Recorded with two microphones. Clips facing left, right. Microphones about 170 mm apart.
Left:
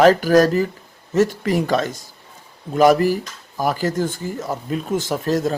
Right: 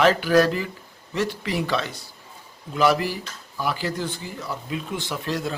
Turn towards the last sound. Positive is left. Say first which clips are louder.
# left 7 dB
turn(degrees=45)  # may be behind; listen again after turning